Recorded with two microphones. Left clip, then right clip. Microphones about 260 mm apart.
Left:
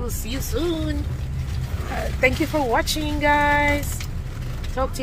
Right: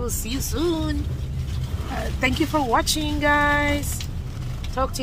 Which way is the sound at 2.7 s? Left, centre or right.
Centre.